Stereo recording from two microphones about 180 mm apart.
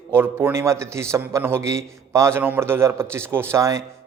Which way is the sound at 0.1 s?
15° right (ahead or behind).